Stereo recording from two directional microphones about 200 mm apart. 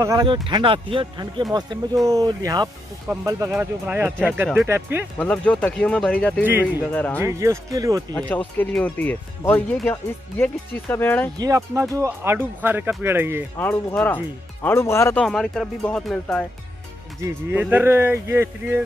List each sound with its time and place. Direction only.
0.0 s speech: 20° right (ahead or behind)
5.2 s speech: 5° left (ahead or behind)
6.4 s speech: 10° right (ahead or behind)
6.9 s speech: 5° left (ahead or behind)
7.2 s speech: 15° right (ahead or behind)
8.1 s speech: 5° left (ahead or behind)
11.3 s speech: 15° right (ahead or behind)
13.6 s speech: 5° left (ahead or behind)
15.2 s speech: centre (ahead or behind)
17.2 s speech: 10° right (ahead or behind)